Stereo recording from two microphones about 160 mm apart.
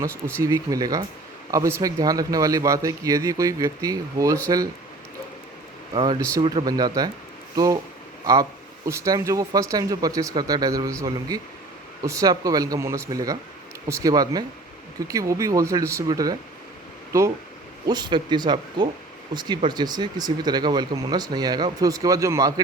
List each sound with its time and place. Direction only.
0.4 s speech: 20° right (ahead or behind)
5.9 s a man's voice: 30° right (ahead or behind)
12.0 s speech: 20° right (ahead or behind)